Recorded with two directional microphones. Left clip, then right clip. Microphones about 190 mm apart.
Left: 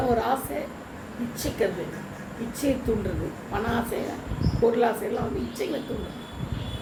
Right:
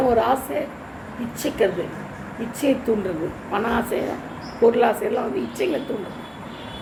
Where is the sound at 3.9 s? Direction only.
40° right (ahead or behind).